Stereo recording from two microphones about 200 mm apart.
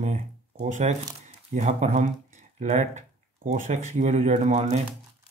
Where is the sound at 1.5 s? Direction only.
35° right (ahead or behind).